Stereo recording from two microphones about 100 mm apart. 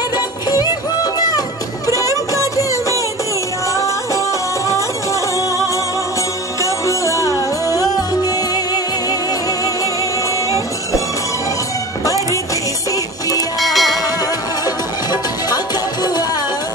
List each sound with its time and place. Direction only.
2.0 s music: 35° left (ahead or behind)
6.6 s music: 30° left (ahead or behind)
12.0 s music: 35° left (ahead or behind)
13.6 s music: centre (ahead or behind)
15.0 s music: 45° left (ahead or behind)